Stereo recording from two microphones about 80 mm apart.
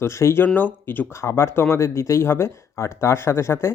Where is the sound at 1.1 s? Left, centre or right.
Left.